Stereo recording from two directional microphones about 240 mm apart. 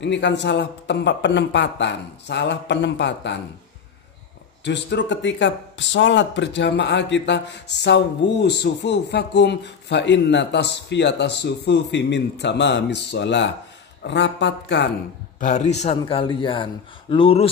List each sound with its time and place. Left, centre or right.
0.0 s speech: left
4.6 s speech: left
15.3 s a man's voice: left